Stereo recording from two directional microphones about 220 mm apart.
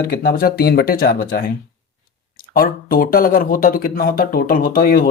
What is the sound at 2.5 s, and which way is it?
Speech, 40° left (ahead or behind).